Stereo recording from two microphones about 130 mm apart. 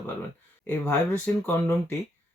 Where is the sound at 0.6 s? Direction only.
15° left (ahead or behind).